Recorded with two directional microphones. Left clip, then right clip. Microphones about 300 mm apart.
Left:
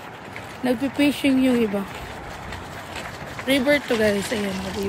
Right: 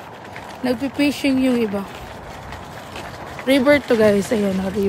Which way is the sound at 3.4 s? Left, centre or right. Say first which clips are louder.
Right 5 dB; centre.